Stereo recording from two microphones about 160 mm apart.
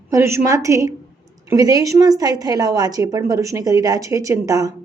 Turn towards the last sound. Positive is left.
turn(degrees=-20)  # may be behind; listen again after turning